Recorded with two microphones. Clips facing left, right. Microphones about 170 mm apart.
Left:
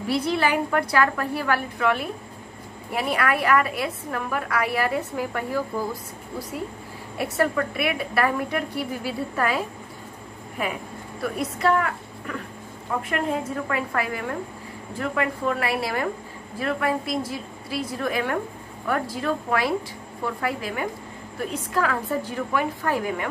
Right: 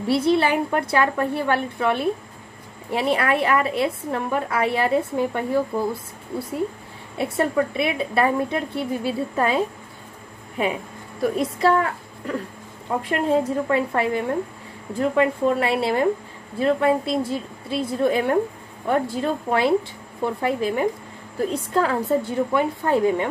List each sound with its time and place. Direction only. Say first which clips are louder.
0.0 s a woman's voice: right 4 dB; 25° right (ahead or behind)
7.2 s a woman's voice: right 2 dB; 25° right (ahead or behind)
11.3 s a woman's voice: right 2 dB; 30° right (ahead or behind)